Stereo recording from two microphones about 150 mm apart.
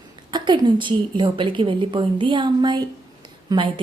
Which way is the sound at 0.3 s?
30° right (ahead or behind).